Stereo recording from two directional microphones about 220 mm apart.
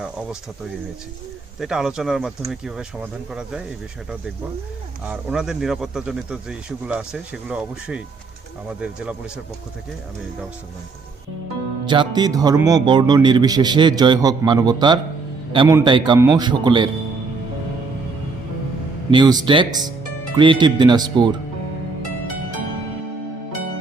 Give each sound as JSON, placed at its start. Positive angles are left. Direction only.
{"t": 1.5, "sound": "speech", "side_deg": 0}
{"t": 5.0, "sound": "speech", "side_deg": -5}
{"t": 11.9, "sound": "a man's voice", "side_deg": -20}
{"t": 19.1, "sound": "a man's voice", "side_deg": -20}